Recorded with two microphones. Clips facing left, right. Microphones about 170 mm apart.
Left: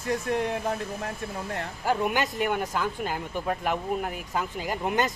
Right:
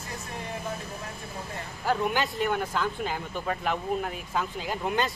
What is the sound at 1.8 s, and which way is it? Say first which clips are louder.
Speech: left 1 dB; 15° left (ahead or behind).